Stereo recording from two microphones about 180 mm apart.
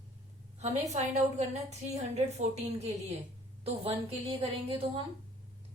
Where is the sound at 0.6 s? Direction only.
40° right (ahead or behind).